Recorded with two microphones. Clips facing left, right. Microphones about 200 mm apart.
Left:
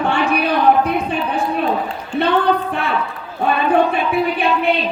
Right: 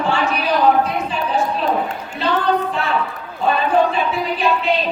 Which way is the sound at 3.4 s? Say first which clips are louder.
Left 1 dB; 60° left (ahead or behind).